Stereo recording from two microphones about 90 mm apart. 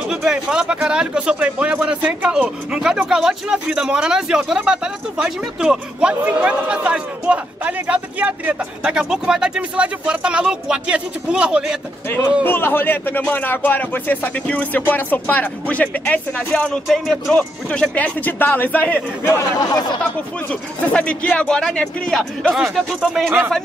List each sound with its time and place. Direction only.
0.1 s speech: 5° right (ahead or behind)
12.4 s speech: 25° left (ahead or behind)
16.8 s speech: centre (ahead or behind); by 18.9 s 15° left (ahead or behind)
19.6 s speech: 45° left (ahead or behind)
20.4 s speech: 15° left (ahead or behind)
22.6 s speech: centre (ahead or behind)